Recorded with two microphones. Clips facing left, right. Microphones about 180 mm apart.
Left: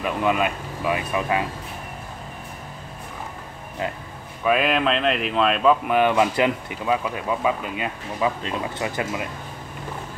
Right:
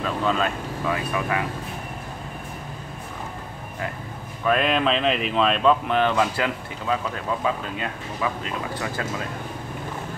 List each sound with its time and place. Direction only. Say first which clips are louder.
0.0 s speech: left 2 dB; 15° left (ahead or behind)
4.5 s speech: left 1 dB; 5° left (ahead or behind)
8.2 s speech: left 4 dB; 20° left (ahead or behind)